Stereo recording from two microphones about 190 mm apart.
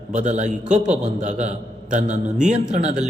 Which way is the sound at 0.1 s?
40° right (ahead or behind).